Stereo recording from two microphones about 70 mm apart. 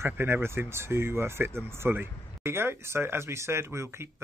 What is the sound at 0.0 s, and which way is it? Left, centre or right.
Speech, right.